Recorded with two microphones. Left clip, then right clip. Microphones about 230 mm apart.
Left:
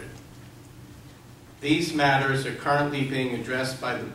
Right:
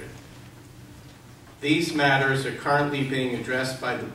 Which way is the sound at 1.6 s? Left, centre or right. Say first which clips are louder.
Right 1 dB; right.